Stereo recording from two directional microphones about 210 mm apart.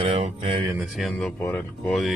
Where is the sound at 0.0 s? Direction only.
30° right (ahead or behind).